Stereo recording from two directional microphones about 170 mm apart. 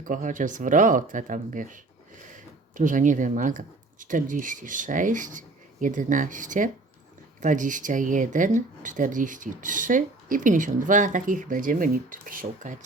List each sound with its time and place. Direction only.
0.0 s speech: 50° right (ahead or behind)